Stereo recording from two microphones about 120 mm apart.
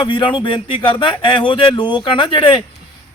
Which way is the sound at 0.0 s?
45° left (ahead or behind).